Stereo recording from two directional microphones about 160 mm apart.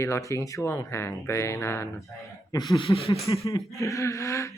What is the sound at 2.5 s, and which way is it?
Speech, 25° left (ahead or behind).